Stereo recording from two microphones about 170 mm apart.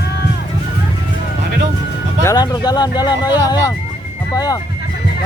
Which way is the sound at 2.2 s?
25° left (ahead or behind).